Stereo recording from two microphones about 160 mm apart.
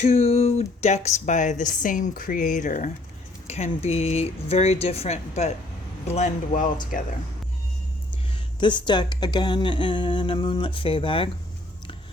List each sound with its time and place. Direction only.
0.0 s speech: 40° left (ahead or behind)
3.4 s a woman's voice: 40° left (ahead or behind)
8.6 s a woman's voice: 30° left (ahead or behind)